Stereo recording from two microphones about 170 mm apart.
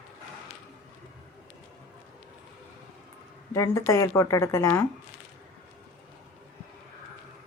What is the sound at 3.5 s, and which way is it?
A woman's voice, 15° left (ahead or behind).